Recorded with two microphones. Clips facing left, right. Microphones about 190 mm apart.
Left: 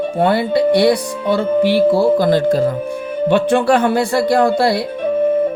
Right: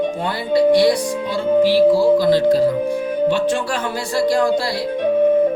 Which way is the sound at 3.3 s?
60° left (ahead or behind).